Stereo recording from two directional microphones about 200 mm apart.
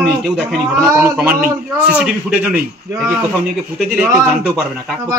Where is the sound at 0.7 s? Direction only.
10° right (ahead or behind).